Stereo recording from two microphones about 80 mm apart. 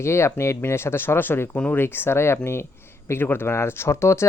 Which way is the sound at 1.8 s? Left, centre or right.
Left.